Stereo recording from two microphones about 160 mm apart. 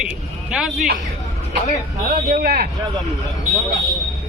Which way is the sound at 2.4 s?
65° right (ahead or behind).